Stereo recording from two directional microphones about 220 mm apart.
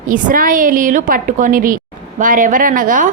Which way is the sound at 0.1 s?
40° right (ahead or behind).